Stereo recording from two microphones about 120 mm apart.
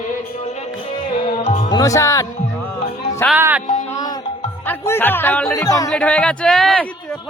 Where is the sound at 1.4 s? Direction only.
90° left.